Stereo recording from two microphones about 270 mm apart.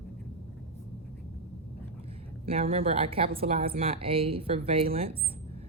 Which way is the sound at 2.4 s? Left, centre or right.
Right.